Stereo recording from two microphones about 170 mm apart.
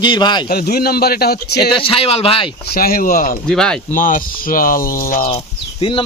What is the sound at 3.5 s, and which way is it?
Speech, 5° left (ahead or behind).